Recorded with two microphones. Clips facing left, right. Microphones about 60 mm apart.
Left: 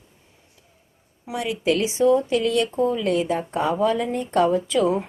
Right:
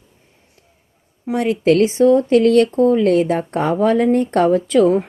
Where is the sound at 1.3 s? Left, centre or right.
Right.